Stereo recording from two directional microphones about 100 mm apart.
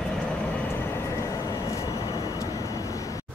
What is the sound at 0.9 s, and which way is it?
Vehicle, 30° left (ahead or behind).